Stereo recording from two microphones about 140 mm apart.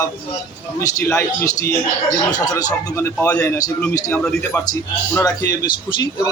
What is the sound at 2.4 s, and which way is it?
A man's voice, 25° left (ahead or behind).